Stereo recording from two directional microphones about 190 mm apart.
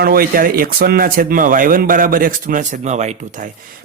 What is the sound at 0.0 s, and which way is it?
Speech, 50° right (ahead or behind).